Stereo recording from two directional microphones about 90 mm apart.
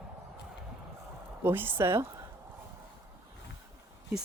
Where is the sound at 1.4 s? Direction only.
25° right (ahead or behind).